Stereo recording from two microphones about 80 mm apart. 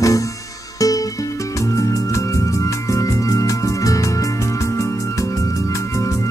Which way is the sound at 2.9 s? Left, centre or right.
Left.